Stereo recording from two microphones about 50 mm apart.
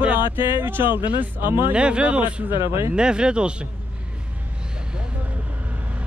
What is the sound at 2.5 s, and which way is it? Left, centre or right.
Speech, right.